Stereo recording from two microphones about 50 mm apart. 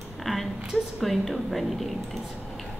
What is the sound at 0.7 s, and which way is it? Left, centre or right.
Speech, centre.